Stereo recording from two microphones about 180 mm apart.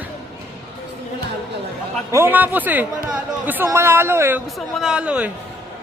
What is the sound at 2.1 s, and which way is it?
Speech, 10° right (ahead or behind).